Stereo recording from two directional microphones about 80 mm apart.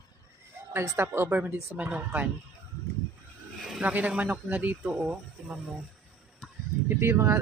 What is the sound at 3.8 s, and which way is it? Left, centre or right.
Speech, centre.